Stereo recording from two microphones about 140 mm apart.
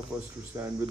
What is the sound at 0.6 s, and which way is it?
Speech, 25° right (ahead or behind).